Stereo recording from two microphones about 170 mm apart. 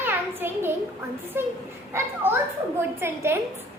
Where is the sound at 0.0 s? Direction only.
10° right (ahead or behind).